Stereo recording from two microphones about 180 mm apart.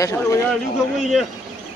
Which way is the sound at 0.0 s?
20° left (ahead or behind).